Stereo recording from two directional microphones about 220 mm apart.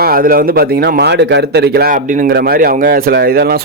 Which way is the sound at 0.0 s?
40° right (ahead or behind).